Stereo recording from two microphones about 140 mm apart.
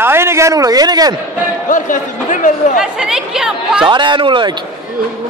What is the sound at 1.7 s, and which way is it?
A man's voice, 65° left (ahead or behind).